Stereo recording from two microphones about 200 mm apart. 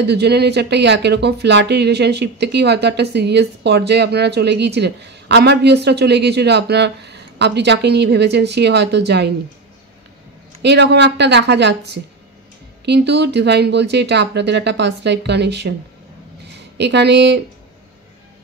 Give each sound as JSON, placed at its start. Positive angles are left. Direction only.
{"t": 0.0, "sound": "speech", "side_deg": -55}
{"t": 10.6, "sound": "speech", "side_deg": -60}
{"t": 16.7, "sound": "speech", "side_deg": -60}